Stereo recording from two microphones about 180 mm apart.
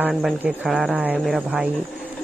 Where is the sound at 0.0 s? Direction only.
5° right (ahead or behind).